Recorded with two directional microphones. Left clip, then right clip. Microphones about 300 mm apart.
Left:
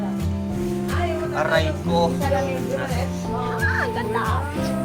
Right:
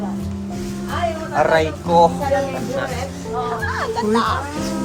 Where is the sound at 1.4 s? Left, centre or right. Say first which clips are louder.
Right 6 dB; right.